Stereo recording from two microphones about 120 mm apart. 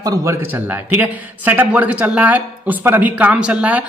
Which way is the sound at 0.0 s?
25° right (ahead or behind).